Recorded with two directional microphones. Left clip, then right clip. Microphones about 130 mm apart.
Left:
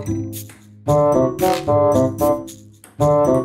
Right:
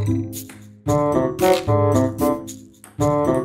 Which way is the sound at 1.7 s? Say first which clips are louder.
Left 4 dB; 15° right (ahead or behind).